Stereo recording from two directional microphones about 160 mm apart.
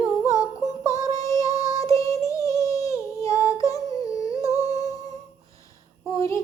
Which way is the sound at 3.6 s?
20° left (ahead or behind).